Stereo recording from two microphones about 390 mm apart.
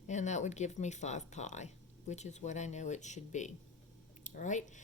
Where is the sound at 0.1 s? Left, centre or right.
Centre.